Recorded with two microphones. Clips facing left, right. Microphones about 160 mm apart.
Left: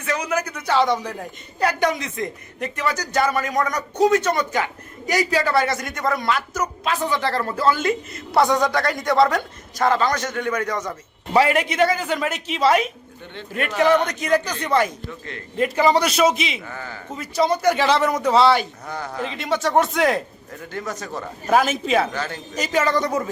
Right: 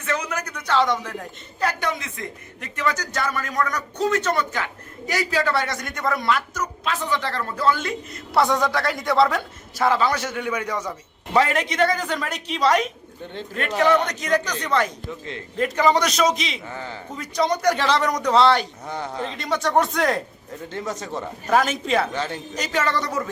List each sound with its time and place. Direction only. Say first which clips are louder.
0.0 s a man's voice: left 3 dB; 10° left (ahead or behind)
2.7 s a man's voice: left 2 dB; 10° left (ahead or behind)
7.1 s speech: left 3 dB; 35° left (ahead or behind)
7.6 s a man's voice: left 2 dB; 5° left (ahead or behind)
11.3 s a man's voice: left 2 dB; 10° left (ahead or behind)
16.6 s speech: right 1 dB; 25° right (ahead or behind)
17.2 s a man's voice: left 2 dB; 5° left (ahead or behind)
18.9 s speech: even; 25° right (ahead or behind)
19.2 s a man's voice: left 3 dB; 5° left (ahead or behind)
20.7 s speech: even; 25° right (ahead or behind)
21.5 s a man's voice: left 2 dB; 5° left (ahead or behind)
22.1 s speech: right 1 dB; 25° right (ahead or behind)
22.5 s a man's voice: left 4 dB; 10° left (ahead or behind)